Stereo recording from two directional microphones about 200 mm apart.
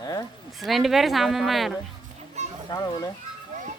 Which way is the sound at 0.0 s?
20° left (ahead or behind).